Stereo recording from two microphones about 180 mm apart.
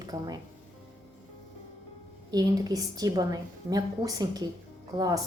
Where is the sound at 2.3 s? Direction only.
20° right (ahead or behind).